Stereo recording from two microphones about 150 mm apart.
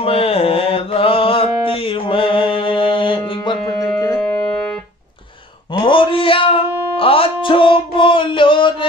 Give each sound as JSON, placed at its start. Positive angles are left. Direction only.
{"t": 0.0, "sound": "mantra", "side_deg": 40}
{"t": 5.8, "sound": "a sound", "side_deg": 35}
{"t": 7.4, "sound": "music", "side_deg": 35}